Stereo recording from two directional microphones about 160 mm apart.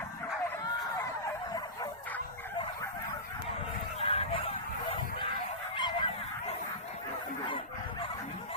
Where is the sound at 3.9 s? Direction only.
40° left (ahead or behind).